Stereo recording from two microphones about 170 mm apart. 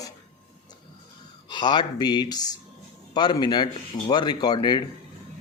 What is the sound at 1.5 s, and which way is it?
Speech, 25° left (ahead or behind).